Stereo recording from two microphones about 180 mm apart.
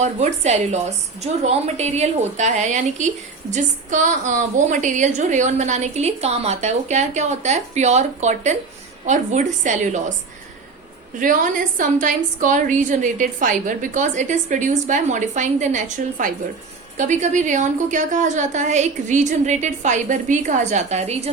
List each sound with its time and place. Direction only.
0.0 s a woman's voice: 40° right (ahead or behind)
11.2 s a woman's voice: 45° right (ahead or behind)